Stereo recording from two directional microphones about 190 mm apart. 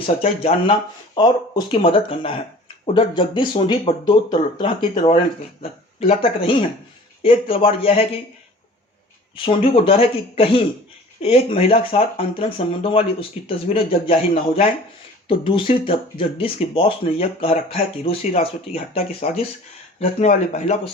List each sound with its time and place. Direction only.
0.0 s speech: 30° left (ahead or behind)
9.3 s speech: 30° left (ahead or behind)